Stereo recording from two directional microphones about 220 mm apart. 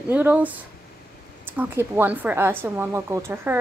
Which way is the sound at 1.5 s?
10° right (ahead or behind).